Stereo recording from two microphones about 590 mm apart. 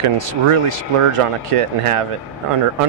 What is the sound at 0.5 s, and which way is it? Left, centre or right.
Speech, right.